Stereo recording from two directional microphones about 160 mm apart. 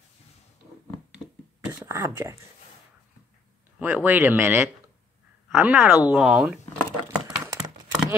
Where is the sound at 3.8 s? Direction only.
10° right (ahead or behind).